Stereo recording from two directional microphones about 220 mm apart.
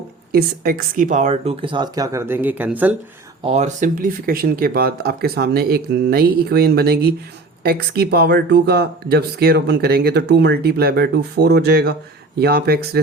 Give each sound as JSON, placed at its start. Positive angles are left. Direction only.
{"t": 0.3, "sound": "speech", "side_deg": -45}
{"t": 3.4, "sound": "speech", "side_deg": -30}